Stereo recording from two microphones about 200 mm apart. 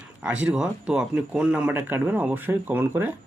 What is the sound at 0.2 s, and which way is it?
Speech, 5° right (ahead or behind).